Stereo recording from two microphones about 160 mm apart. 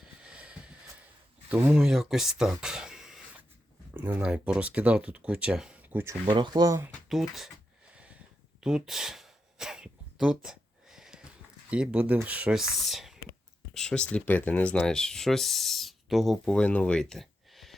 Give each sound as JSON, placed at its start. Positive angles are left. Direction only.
{"t": 0.0, "sound": "vehicle", "side_deg": -5}
{"t": 1.5, "sound": "speech", "side_deg": -5}
{"t": 6.2, "sound": "speech", "side_deg": -30}
{"t": 7.1, "sound": "speech", "side_deg": 0}
{"t": 7.9, "sound": "a sound", "side_deg": -10}
{"t": 11.7, "sound": "speech", "side_deg": -5}